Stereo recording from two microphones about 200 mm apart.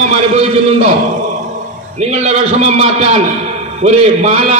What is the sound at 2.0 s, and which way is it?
A man's voice, 30° right (ahead or behind).